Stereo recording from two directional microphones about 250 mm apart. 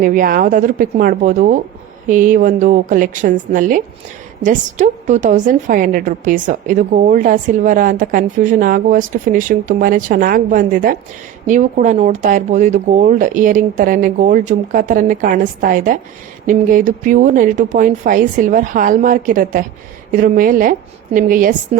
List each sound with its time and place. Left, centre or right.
0.0 s a woman's voice: right